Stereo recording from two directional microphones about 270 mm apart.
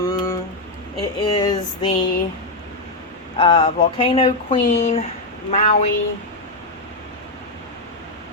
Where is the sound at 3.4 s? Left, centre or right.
Left.